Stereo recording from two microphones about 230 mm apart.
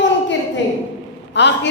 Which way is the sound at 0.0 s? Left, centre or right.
Left.